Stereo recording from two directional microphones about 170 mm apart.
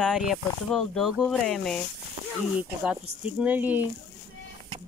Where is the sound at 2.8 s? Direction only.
5° right (ahead or behind).